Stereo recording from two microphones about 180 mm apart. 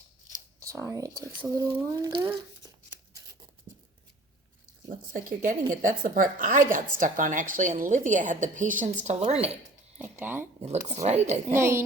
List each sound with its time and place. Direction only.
0.6 s speech: 15° right (ahead or behind)
1.5 s a sound: 20° right (ahead or behind)
4.9 s a woman's voice: 45° right (ahead or behind)
10.0 s speech: 10° right (ahead or behind)
10.9 s speech: 40° right (ahead or behind)
11.5 s a woman's voice: 15° right (ahead or behind)